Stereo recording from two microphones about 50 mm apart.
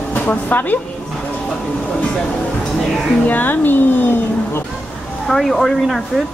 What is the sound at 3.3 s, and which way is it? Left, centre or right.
Speech, left.